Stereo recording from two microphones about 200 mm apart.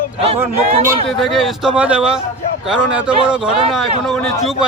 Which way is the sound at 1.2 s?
Centre (ahead or behind).